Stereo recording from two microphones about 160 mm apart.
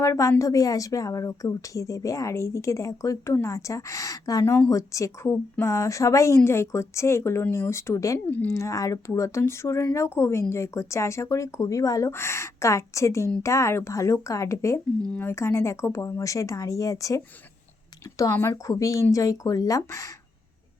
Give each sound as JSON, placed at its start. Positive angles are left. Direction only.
{"t": 0.0, "sound": "a woman's voice", "side_deg": 20}